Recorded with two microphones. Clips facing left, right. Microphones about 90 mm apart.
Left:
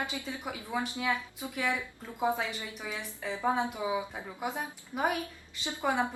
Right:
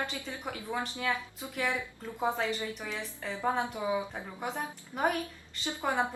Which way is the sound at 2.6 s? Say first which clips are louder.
Right 2 dB; 15° left (ahead or behind).